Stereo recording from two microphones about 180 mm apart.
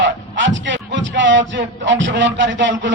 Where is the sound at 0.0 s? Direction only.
90° right.